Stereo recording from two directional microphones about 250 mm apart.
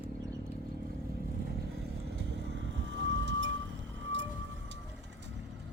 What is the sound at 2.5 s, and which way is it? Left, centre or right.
Vehicle, right.